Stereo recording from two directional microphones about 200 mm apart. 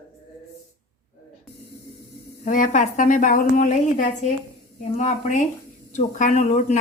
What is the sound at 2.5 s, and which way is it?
A woman's voice, 40° left (ahead or behind).